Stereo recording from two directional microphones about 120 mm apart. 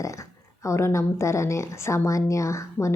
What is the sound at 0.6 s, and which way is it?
A woman's voice, 25° left (ahead or behind).